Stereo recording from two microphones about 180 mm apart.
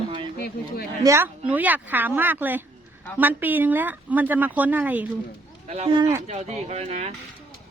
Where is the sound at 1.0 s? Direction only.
15° right (ahead or behind).